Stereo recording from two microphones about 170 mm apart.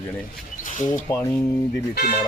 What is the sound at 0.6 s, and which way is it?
Speech, 50° left (ahead or behind).